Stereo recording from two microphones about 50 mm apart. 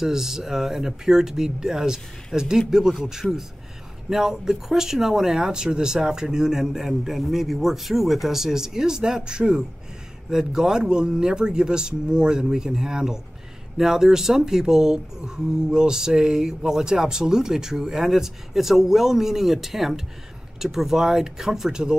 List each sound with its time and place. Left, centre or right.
0.0 s speech: centre